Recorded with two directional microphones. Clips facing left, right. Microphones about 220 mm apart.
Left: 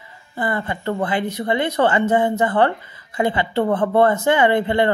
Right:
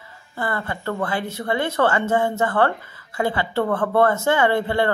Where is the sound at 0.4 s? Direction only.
20° left (ahead or behind).